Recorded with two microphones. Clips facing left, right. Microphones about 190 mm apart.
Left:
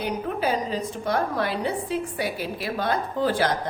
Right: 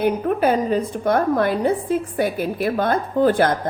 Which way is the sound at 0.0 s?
55° right (ahead or behind).